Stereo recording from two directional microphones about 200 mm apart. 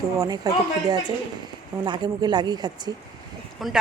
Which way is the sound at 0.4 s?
20° right (ahead or behind).